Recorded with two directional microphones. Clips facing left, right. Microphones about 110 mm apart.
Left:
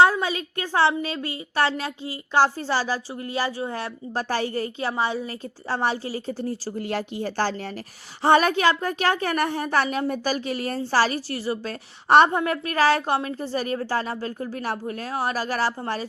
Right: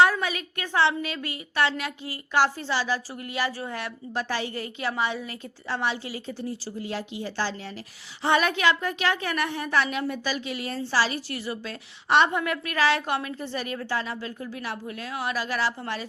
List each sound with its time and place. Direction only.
0.0 s a woman's voice: 30° left (ahead or behind); by 7.7 s 50° left (ahead or behind)
8.2 s a woman's voice: 40° left (ahead or behind)
11.3 s a woman's voice: 35° left (ahead or behind)